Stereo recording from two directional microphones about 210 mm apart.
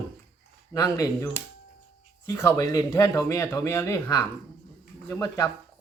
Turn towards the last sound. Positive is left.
turn(degrees=15)  # may be behind; listen again after turning